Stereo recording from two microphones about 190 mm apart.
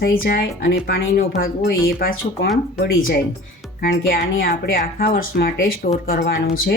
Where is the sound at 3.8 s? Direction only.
50° left (ahead or behind).